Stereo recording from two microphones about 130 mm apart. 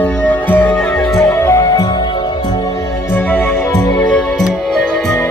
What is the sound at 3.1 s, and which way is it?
Music, 15° left (ahead or behind).